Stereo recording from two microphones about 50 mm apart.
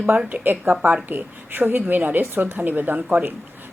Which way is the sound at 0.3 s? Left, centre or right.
Right.